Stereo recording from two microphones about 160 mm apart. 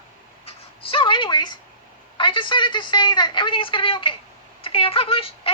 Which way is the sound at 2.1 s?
30° left (ahead or behind).